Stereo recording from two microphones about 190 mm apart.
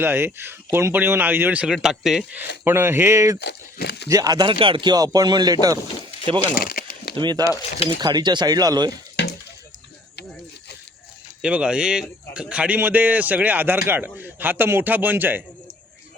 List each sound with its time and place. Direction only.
0.0 s a man's voice: 10° right (ahead or behind)
3.4 s speech: 60° left (ahead or behind)
4.1 s speech: 20° right (ahead or behind)
6.6 s a sound: 50° left (ahead or behind)
7.2 s speech: 25° right (ahead or behind)
9.2 s a sound: 65° left (ahead or behind)
11.4 s a man's voice: 5° right (ahead or behind)